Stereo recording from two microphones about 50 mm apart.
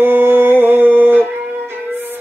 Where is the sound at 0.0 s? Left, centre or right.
Right.